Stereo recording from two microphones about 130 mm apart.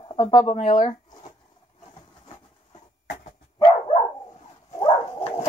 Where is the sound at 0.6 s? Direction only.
60° left (ahead or behind).